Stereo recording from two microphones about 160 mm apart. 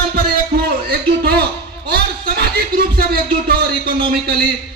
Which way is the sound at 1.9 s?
80° right.